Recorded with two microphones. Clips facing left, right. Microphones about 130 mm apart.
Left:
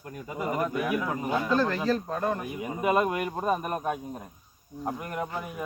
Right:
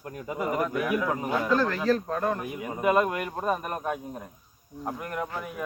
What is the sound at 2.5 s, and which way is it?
Speech, 20° left (ahead or behind).